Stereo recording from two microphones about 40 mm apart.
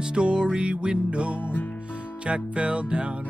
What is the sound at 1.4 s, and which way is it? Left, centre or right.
Music, left.